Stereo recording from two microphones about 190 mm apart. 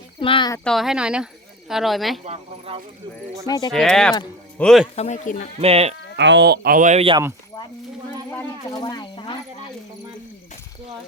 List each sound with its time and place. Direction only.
0.2 s speech: 25° left (ahead or behind)
0.6 s speech: centre (ahead or behind)
2.2 s speech: 35° right (ahead or behind)
3.7 s speech: centre (ahead or behind)
4.9 s speech: 40° left (ahead or behind)
5.5 s speech: 30° right (ahead or behind)
6.1 s speech: 70° right (ahead or behind); by 7.2 s 30° right (ahead or behind)
8.3 s a sound: 20° left (ahead or behind)